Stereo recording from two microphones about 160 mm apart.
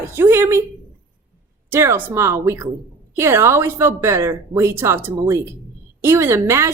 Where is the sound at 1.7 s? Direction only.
15° right (ahead or behind).